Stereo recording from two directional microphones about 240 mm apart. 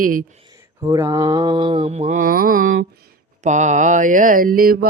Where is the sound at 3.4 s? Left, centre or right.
Right.